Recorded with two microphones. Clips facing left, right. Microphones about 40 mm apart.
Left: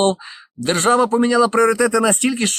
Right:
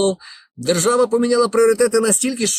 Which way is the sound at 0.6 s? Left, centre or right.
Left.